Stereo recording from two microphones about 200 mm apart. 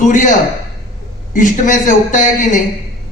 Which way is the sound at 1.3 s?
40° left (ahead or behind).